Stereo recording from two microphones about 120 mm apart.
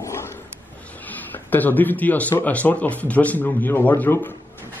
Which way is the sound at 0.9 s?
15° left (ahead or behind).